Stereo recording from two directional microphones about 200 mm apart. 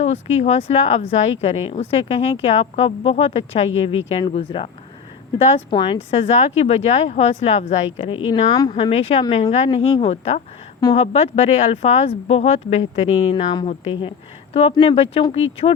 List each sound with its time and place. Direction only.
0.0 s speech: 35° left (ahead or behind)
5.7 s speech: 25° left (ahead or behind)
8.4 s speech: 20° left (ahead or behind)
8.7 s speech: 30° left (ahead or behind)